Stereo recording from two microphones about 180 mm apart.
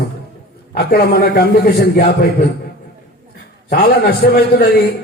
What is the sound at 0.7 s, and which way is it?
A man's voice, 60° left (ahead or behind).